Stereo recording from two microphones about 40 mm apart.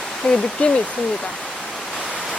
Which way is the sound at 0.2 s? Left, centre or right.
Left.